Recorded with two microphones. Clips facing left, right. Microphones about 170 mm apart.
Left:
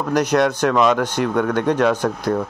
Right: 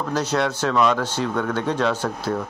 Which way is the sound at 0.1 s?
15° left (ahead or behind).